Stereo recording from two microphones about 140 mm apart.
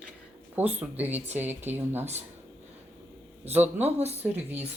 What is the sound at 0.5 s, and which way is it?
Speech, 10° right (ahead or behind).